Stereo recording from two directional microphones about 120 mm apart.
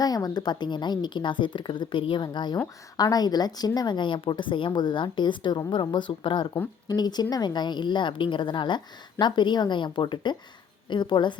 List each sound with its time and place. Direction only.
0.0 s a woman's voice: 35° left (ahead or behind)